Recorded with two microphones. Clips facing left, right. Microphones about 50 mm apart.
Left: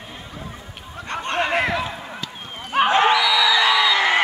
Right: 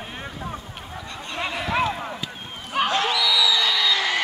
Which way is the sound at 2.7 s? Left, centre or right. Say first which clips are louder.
Left 6 dB; left.